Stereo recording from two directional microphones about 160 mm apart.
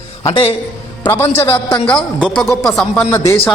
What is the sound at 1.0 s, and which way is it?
A man's voice, 15° left (ahead or behind).